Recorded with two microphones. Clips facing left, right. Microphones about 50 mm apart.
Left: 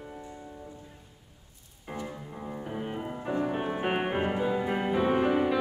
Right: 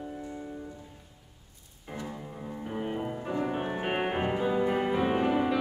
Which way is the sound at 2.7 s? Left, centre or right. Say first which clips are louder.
Right 4 dB; centre.